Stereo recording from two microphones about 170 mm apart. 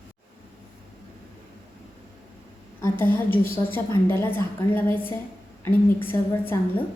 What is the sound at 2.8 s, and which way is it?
A woman's voice, 10° left (ahead or behind).